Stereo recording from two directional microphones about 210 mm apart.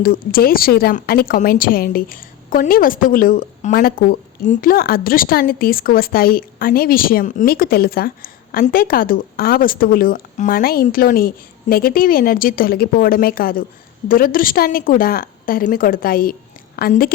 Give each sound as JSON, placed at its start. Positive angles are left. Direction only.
{"t": 0.0, "sound": "a woman's voice", "side_deg": 45}